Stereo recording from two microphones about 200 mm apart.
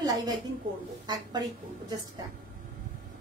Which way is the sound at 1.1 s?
20° right (ahead or behind).